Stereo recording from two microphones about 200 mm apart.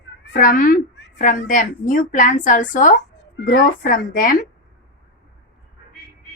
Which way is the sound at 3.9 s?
45° left (ahead or behind).